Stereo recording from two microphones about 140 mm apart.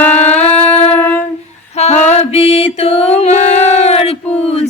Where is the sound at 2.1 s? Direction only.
50° left (ahead or behind).